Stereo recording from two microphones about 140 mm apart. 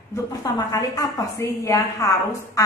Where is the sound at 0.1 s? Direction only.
25° left (ahead or behind).